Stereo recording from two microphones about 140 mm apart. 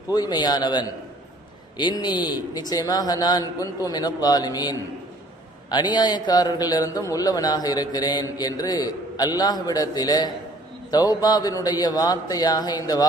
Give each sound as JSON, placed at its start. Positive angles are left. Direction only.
{"t": 0.1, "sound": "a man's voice", "side_deg": 30}